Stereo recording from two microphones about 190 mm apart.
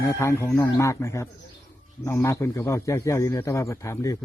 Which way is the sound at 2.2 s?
15° left (ahead or behind).